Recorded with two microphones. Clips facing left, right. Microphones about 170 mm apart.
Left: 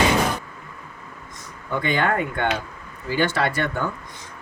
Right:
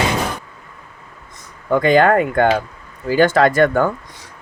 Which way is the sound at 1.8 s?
90° right.